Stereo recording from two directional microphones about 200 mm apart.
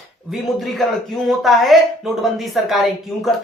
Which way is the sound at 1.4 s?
Centre (ahead or behind).